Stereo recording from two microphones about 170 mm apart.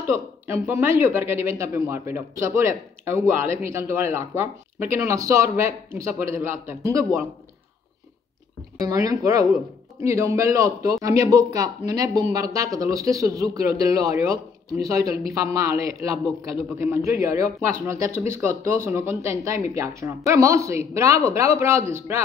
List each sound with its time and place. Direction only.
0.1 s speech: 15° right (ahead or behind)
8.8 s a man's voice: 20° right (ahead or behind)